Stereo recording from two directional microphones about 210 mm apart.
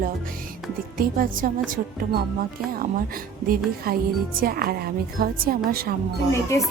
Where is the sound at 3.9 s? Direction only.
45° right (ahead or behind).